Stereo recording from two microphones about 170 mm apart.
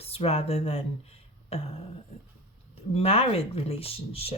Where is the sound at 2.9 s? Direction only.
35° left (ahead or behind).